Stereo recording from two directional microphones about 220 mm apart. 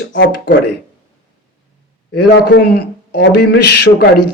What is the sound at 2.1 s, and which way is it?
A man's voice, 50° left (ahead or behind).